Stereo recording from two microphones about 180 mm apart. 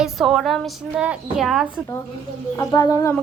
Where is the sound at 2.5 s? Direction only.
20° left (ahead or behind).